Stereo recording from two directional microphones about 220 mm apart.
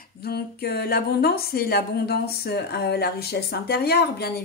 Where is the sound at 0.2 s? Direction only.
45° left (ahead or behind).